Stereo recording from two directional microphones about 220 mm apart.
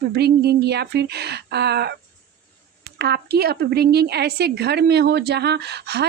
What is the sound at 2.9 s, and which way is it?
Speech, 45° right (ahead or behind).